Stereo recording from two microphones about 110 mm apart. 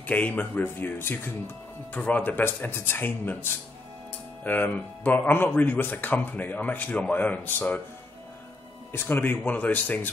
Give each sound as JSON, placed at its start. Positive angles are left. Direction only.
{"t": 0.0, "sound": "speech", "side_deg": 15}
{"t": 4.5, "sound": "speech", "side_deg": 15}
{"t": 8.9, "sound": "speech", "side_deg": 20}